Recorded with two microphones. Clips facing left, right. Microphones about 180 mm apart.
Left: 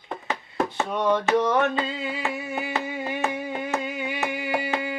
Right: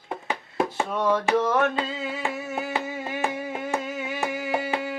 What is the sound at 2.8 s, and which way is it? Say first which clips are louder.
Carnatic music: left 1 dB; centre (ahead or behind).